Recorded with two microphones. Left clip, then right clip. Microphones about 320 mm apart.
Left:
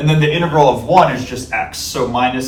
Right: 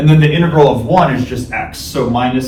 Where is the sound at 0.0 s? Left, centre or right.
Centre.